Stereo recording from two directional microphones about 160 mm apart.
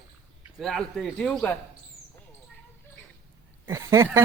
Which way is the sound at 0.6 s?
Centre (ahead or behind).